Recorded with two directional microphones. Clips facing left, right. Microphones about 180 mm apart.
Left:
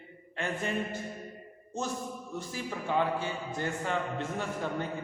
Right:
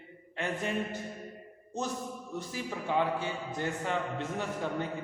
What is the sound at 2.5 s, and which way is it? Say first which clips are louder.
A man's voice: even; 15° right (ahead or behind).